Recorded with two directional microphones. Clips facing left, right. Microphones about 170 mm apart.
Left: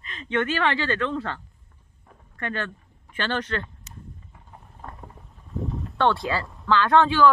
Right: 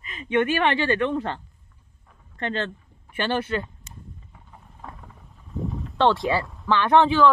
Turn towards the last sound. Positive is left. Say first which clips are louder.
# right 1 dB
turn(degrees=-20)  # may be behind; listen again after turning